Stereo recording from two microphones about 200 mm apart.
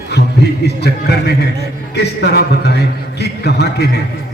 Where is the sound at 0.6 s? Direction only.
55° left (ahead or behind).